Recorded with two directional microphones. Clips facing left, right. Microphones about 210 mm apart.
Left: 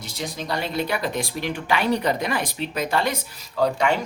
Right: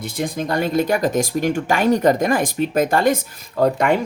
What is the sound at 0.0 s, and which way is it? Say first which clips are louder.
Speech: right 8 dB; 55° right (ahead or behind).